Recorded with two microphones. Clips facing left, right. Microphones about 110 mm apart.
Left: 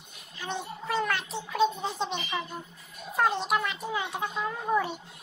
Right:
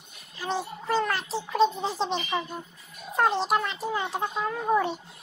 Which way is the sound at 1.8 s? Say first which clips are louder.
Right 3 dB; 30° right (ahead or behind).